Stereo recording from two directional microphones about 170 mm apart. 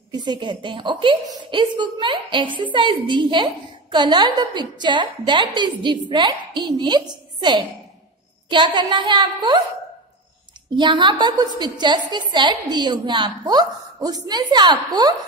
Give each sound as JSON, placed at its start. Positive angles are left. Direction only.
{"t": 0.1, "sound": "a woman's voice", "side_deg": -25}
{"t": 10.8, "sound": "a woman's voice", "side_deg": -25}